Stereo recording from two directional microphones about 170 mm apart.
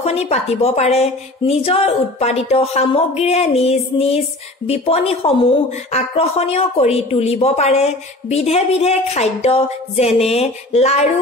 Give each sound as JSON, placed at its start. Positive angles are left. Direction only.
{"t": 0.0, "sound": "a woman's voice", "side_deg": 40}